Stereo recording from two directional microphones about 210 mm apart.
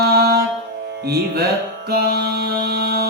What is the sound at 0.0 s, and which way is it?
Music, 50° right (ahead or behind).